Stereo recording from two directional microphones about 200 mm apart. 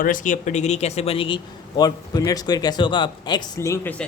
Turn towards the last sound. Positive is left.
turn(degrees=10)  # may be behind; listen again after turning